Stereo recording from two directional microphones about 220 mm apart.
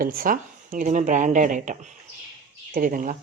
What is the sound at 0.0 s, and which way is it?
Speech, 40° right (ahead or behind).